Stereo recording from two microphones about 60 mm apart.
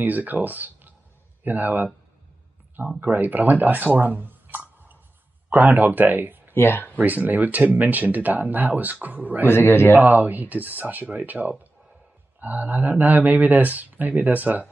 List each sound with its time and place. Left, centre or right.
0.0 s speech: right
3.0 s speech: right
6.5 s speech: left
7.0 s speech: right
9.5 s a man's voice: left
9.9 s speech: right